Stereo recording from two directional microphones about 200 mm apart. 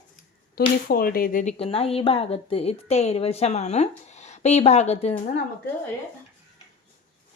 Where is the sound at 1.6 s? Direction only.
30° left (ahead or behind).